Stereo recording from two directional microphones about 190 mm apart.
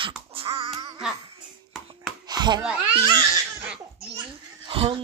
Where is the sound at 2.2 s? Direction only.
20° right (ahead or behind).